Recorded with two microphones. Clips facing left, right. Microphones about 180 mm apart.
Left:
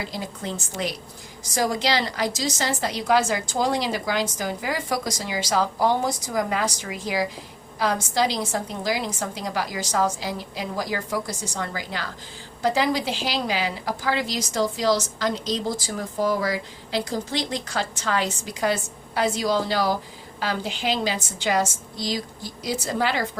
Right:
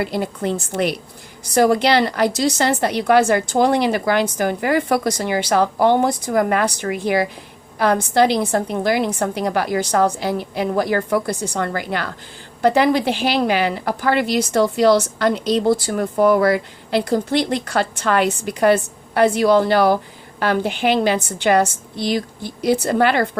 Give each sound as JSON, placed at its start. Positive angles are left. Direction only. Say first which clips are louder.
{"t": 0.0, "sound": "a woman's voice", "louder": "right 10 dB", "side_deg": -60}